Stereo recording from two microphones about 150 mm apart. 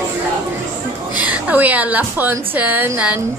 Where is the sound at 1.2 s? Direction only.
10° right (ahead or behind).